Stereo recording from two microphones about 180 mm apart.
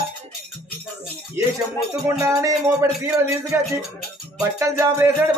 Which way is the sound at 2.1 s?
15° right (ahead or behind).